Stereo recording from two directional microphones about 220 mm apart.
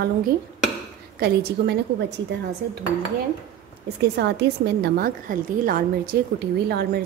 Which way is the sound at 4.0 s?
50° right (ahead or behind).